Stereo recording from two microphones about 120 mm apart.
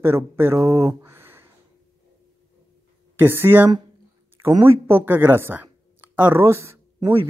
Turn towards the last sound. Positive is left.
turn(degrees=-25)  # may be behind; listen again after turning